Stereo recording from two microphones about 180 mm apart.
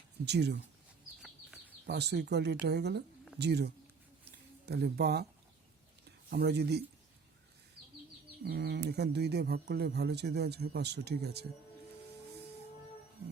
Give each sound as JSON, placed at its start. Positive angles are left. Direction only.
{"t": 0.3, "sound": "speech", "side_deg": -70}
{"t": 1.2, "sound": "a sound", "side_deg": -5}
{"t": 1.9, "sound": "speech", "side_deg": -70}
{"t": 4.3, "sound": "a sound", "side_deg": -65}
{"t": 6.1, "sound": "speech", "side_deg": -65}
{"t": 8.4, "sound": "speech", "side_deg": -60}